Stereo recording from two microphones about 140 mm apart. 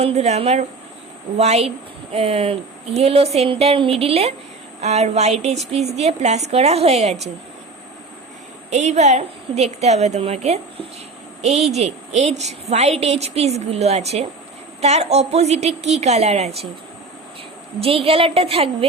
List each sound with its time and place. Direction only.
0.0 s a woman's voice: 50° right (ahead or behind)
8.7 s a woman's voice: 55° right (ahead or behind)
17.7 s a woman's voice: 45° right (ahead or behind)